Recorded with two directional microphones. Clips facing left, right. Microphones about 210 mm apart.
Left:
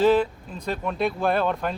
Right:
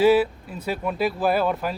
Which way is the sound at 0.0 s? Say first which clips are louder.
Right 2 dB; 10° right (ahead or behind).